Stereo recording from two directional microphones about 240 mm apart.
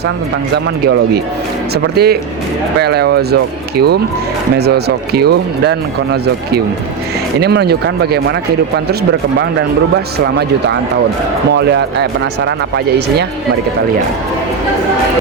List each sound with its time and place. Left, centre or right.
0.5 s speech: right
11.5 s speech: right